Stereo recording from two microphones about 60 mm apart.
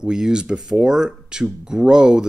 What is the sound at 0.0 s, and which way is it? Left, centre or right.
A man's voice, centre.